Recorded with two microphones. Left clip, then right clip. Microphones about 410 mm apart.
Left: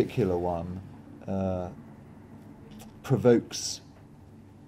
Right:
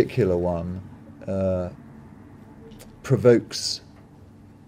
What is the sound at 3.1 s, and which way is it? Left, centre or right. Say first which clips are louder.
Speech: right 5 dB; centre.